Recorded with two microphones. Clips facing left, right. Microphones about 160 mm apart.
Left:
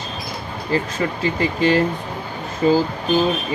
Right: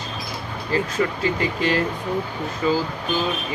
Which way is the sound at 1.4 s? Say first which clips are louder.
Left 7 dB; 30° left (ahead or behind).